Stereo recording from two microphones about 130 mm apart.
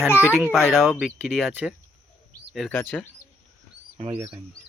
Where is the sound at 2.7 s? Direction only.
15° left (ahead or behind).